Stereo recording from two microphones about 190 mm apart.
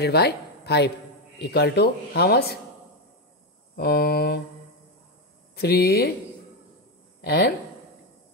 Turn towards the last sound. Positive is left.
turn(degrees=60)  # may be behind; listen again after turning